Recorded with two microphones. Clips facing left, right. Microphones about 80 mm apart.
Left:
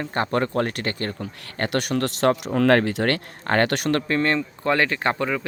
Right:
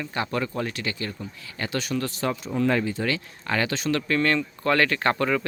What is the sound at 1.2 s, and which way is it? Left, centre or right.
Speech, left.